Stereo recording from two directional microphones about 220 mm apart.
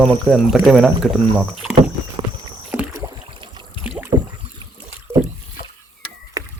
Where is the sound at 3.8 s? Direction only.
5° right (ahead or behind).